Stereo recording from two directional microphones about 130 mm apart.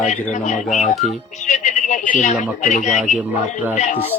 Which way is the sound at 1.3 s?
65° left (ahead or behind).